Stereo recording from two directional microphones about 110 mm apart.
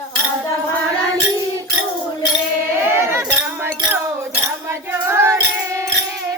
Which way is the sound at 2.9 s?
20° right (ahead or behind).